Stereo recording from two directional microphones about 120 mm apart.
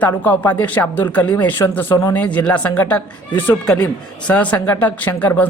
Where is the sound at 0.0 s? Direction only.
15° left (ahead or behind).